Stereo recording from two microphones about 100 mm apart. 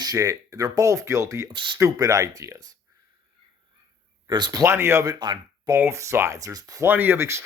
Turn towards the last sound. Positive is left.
turn(degrees=-25)  # may be behind; listen again after turning